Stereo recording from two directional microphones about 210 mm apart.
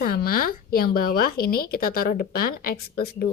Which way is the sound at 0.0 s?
45° left (ahead or behind).